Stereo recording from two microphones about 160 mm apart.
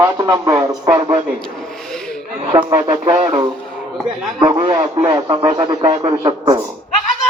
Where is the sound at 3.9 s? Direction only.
Centre (ahead or behind).